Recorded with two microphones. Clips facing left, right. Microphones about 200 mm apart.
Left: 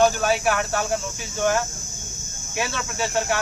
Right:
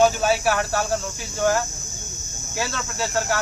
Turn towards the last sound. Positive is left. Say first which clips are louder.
# even
turn(degrees=0)  # may be behind; listen again after turning